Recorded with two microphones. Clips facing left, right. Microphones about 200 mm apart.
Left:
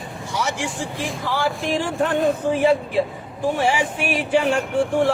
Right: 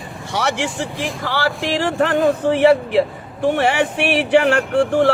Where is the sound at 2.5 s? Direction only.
75° right (ahead or behind).